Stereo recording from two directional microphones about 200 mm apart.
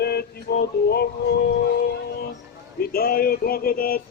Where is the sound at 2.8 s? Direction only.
50° left (ahead or behind).